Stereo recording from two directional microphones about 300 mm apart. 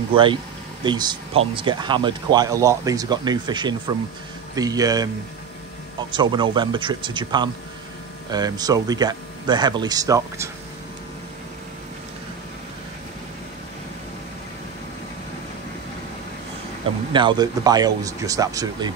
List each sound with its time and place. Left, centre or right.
0.1 s speech: centre
6.1 s speech: centre
17.1 s speech: centre